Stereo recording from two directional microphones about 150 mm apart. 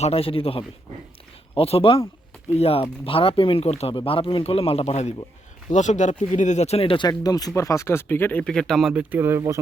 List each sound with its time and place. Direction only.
0.0 s speech: 40° left (ahead or behind); by 9.0 s 5° right (ahead or behind)
9.1 s speech: 15° right (ahead or behind)